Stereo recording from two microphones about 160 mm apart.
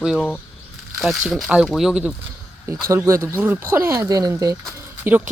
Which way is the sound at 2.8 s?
15° right (ahead or behind).